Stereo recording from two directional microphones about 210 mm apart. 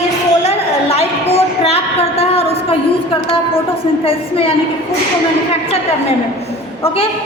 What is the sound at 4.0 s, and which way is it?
Speech, 25° left (ahead or behind).